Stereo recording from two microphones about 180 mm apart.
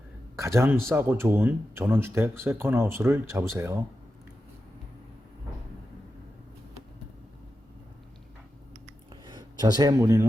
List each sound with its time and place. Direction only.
0.3 s speech: 15° right (ahead or behind)
9.2 s speech: 25° right (ahead or behind)